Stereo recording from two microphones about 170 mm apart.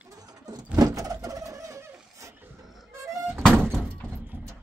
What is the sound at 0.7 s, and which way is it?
Vehicle, 20° right (ahead or behind).